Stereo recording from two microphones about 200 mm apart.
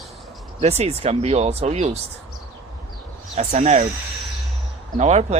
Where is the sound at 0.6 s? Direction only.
30° right (ahead or behind).